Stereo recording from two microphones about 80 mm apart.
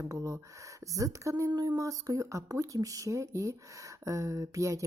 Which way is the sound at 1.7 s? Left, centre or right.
Right.